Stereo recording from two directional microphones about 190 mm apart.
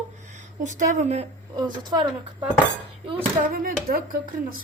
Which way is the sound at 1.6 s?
25° right (ahead or behind).